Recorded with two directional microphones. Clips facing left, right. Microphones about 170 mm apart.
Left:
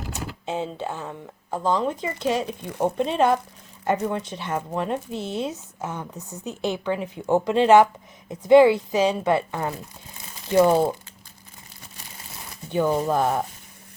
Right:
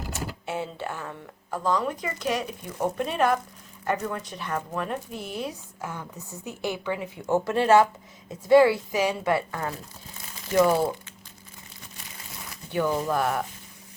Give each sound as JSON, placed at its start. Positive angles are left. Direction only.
{"t": 0.1, "sound": "speech", "side_deg": 20}
{"t": 12.7, "sound": "speech", "side_deg": 20}